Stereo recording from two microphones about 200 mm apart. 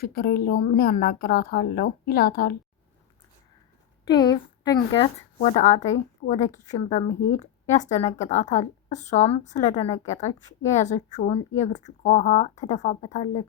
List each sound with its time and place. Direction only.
0.0 s a woman's voice: 50° left (ahead or behind)
4.0 s speech: 20° left (ahead or behind)
5.4 s a woman's voice: 40° left (ahead or behind)